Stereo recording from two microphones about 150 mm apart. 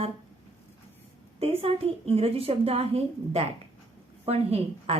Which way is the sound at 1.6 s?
40° right (ahead or behind).